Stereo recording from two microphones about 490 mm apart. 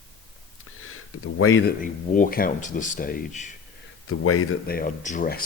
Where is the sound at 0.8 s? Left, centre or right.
Left.